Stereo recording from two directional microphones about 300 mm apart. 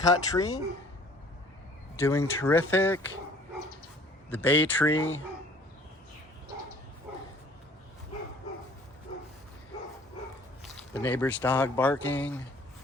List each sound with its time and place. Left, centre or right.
0.0 s speech: centre
2.0 s speech: centre
4.3 s speech: centre
4.9 s speech: left
10.6 s speech: centre